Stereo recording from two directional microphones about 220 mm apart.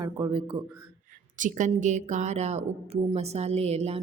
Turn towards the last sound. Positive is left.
turn(degrees=-30)  # may be behind; listen again after turning